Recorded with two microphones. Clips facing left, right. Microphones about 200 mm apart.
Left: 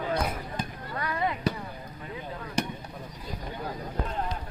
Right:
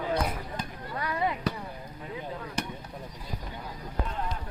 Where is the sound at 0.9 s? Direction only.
10° right (ahead or behind).